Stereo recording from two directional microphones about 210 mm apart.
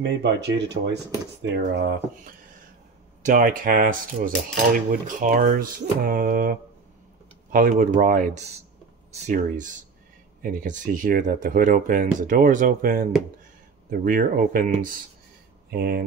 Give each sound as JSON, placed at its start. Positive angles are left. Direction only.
{"t": 0.0, "sound": "speech", "side_deg": -55}
{"t": 3.3, "sound": "cutlery", "side_deg": -40}
{"t": 13.8, "sound": "speech", "side_deg": -45}